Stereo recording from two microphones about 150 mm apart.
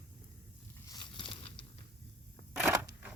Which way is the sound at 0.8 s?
30° left (ahead or behind).